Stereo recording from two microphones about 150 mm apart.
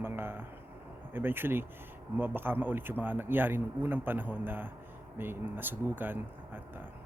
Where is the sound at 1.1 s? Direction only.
15° right (ahead or behind).